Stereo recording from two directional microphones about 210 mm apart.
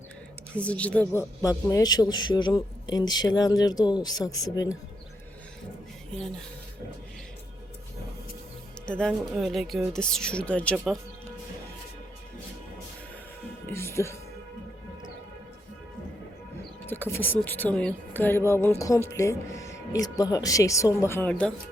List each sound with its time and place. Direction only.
0.5 s speech: 5° left (ahead or behind)
8.9 s speech: 5° left (ahead or behind)
13.7 s music: 10° left (ahead or behind)
16.8 s speech: 10° left (ahead or behind)